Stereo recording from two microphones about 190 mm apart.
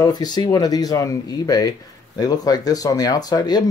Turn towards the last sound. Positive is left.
turn(degrees=20)  # may be behind; listen again after turning